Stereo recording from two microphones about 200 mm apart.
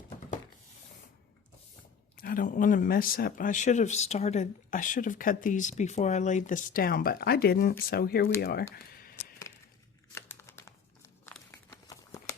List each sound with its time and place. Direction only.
2.1 s speech: 45° left (ahead or behind)
8.7 s a sound: 50° left (ahead or behind)
10.2 s crumpling: 10° left (ahead or behind)